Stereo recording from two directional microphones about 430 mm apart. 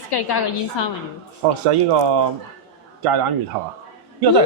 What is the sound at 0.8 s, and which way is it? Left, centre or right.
Speech, left.